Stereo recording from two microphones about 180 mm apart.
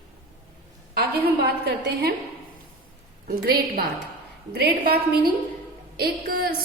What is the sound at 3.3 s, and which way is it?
A woman's voice, 55° right (ahead or behind).